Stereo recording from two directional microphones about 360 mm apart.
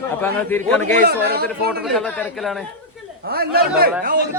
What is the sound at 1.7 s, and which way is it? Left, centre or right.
Speech, centre.